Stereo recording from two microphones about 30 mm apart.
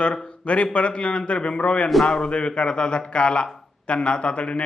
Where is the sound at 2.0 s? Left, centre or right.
Left.